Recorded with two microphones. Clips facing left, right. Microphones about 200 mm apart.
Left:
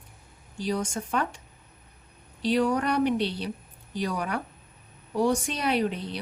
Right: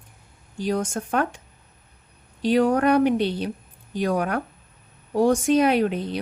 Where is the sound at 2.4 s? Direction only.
50° right (ahead or behind).